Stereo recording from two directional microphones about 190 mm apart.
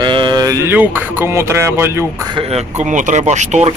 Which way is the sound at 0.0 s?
25° right (ahead or behind).